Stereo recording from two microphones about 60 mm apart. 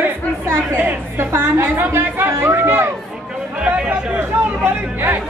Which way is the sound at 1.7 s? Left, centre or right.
Right.